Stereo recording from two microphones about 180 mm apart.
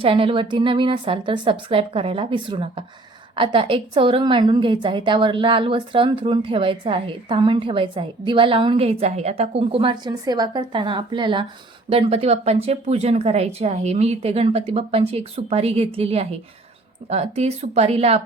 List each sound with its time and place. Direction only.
0.0 s a woman's voice: 30° right (ahead or behind)